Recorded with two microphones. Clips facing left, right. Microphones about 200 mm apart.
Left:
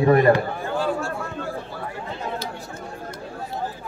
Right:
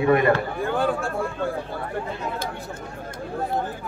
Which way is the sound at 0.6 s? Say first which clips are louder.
Right 1 dB; 55° right (ahead or behind).